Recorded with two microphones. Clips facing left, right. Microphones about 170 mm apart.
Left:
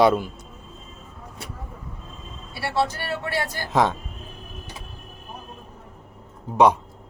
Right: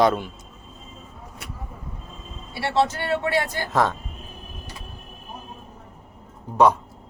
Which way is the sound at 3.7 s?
15° left (ahead or behind).